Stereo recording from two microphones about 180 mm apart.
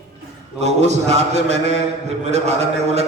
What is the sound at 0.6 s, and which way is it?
A man's voice, 40° right (ahead or behind).